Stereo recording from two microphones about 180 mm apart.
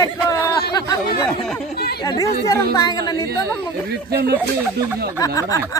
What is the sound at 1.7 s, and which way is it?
Speech, 60° left (ahead or behind).